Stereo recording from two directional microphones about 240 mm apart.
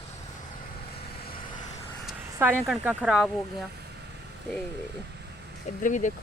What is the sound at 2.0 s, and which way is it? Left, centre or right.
Speech, centre.